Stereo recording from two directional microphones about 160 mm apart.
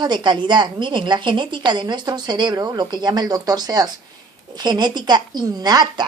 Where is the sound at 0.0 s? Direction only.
25° right (ahead or behind).